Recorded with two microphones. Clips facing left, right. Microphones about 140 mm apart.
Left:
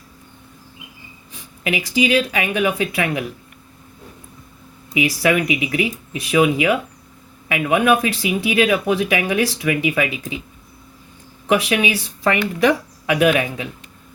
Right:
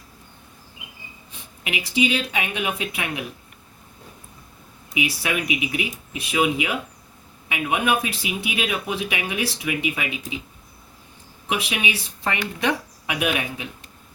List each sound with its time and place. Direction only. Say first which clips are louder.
1.3 s speech: left 7 dB; 90° left
4.9 s speech: left 8 dB; 90° left
11.4 s speech: left 8 dB; 90° left